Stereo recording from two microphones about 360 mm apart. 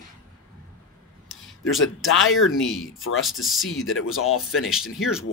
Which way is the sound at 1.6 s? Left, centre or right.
Left.